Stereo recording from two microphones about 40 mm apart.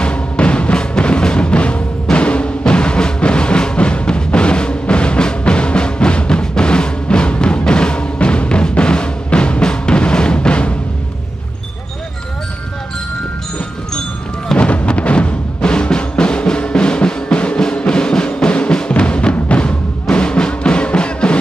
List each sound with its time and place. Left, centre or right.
0.0 s music: left
14.6 s music: left